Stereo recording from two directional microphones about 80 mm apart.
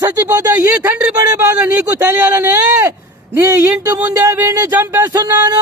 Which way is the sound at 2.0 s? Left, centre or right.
Right.